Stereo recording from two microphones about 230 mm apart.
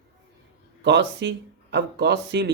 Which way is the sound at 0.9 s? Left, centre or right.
Right.